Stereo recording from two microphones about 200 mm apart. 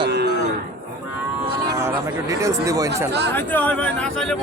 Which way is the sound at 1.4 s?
15° right (ahead or behind).